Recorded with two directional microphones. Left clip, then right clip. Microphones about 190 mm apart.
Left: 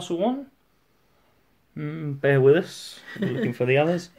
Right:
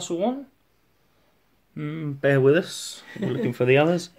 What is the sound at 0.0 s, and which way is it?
Speech, 5° right (ahead or behind).